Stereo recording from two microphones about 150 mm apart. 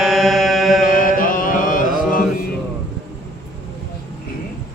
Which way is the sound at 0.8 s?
70° left (ahead or behind).